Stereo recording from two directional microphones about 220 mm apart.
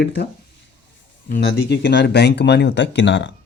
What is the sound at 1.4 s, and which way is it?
Speech, 50° left (ahead or behind).